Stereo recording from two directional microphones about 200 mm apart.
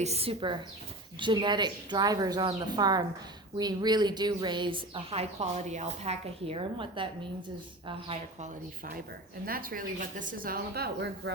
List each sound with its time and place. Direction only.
0.0 s a woman's voice: 30° right (ahead or behind)
9.5 s speech: 45° right (ahead or behind)